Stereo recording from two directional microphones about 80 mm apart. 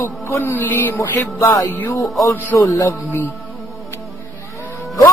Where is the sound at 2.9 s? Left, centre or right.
Left.